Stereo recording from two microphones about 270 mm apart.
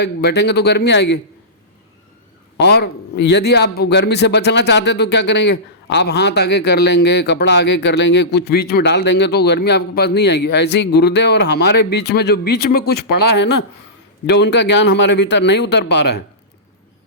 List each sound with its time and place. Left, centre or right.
0.0 s a man's voice: left
2.6 s a man's voice: left
14.3 s a man's voice: left